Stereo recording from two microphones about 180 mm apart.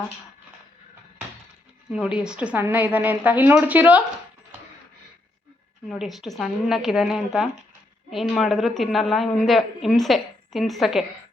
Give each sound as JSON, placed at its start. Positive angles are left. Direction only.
{"t": 1.9, "sound": "a woman's voice", "side_deg": -5}
{"t": 5.9, "sound": "a woman's voice", "side_deg": 0}